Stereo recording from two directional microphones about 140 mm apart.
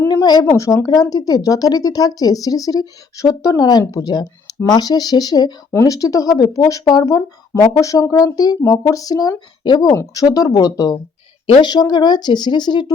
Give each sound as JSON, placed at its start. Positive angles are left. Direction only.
{"t": 0.1, "sound": "speech", "side_deg": 30}
{"t": 11.4, "sound": "speech", "side_deg": 35}